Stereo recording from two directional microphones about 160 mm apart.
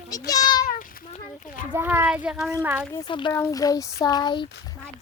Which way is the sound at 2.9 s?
25° left (ahead or behind).